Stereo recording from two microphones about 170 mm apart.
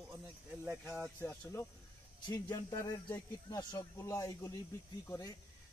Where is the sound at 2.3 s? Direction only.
20° left (ahead or behind).